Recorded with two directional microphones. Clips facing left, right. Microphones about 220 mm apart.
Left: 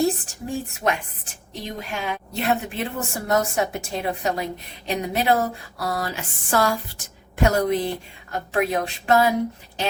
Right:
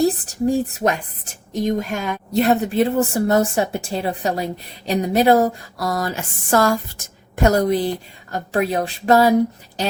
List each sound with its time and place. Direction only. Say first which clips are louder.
0.0 s speech: right 5 dB; 35° right (ahead or behind)